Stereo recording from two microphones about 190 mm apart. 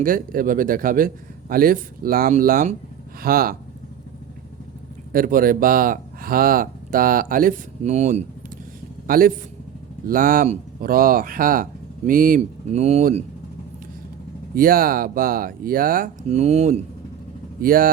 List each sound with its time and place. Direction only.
0.0 s speech: 45° right (ahead or behind)
5.1 s speech: 50° right (ahead or behind)
9.0 s speech: 50° right (ahead or behind)
12.4 s speech: 35° right (ahead or behind)
14.5 s speech: 50° right (ahead or behind)
16.3 s speech: 35° right (ahead or behind)
17.6 s speech: 50° right (ahead or behind)